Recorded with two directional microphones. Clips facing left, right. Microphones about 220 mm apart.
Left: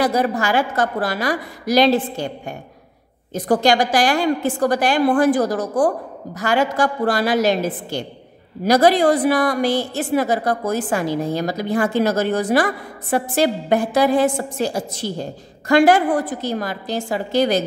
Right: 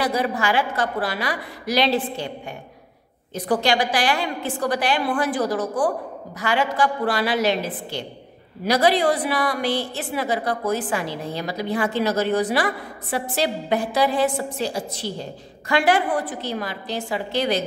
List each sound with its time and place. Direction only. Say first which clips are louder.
0.0 s a woman's voice: left 4 dB; 45° left (ahead or behind)